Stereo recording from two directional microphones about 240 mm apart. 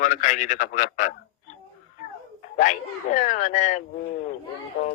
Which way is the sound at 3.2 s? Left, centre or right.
Left.